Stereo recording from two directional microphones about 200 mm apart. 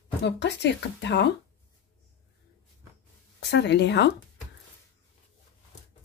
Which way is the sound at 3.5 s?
60° left (ahead or behind).